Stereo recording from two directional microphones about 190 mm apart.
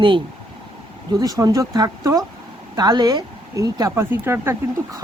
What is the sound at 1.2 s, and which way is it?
Speech, 20° right (ahead or behind).